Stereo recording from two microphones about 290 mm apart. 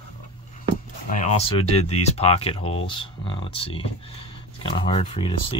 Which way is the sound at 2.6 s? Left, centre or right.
Left.